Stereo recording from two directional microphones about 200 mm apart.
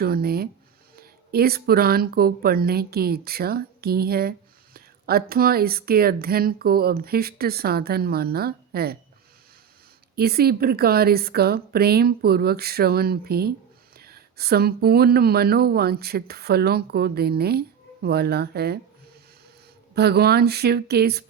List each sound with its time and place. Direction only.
0.0 s speech: 50° right (ahead or behind)
10.2 s speech: 50° right (ahead or behind)
19.9 s speech: 55° right (ahead or behind)